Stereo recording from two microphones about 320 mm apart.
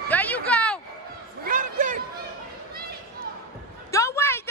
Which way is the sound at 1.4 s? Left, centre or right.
Right.